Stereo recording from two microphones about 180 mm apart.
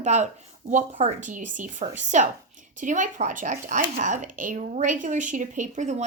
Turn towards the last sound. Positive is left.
turn(degrees=-40)  # may be behind; listen again after turning